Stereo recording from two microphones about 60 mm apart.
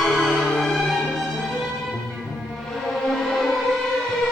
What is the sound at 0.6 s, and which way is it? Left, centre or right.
Music, centre.